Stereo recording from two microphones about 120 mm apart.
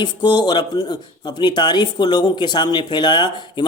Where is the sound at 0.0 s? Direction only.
40° left (ahead or behind).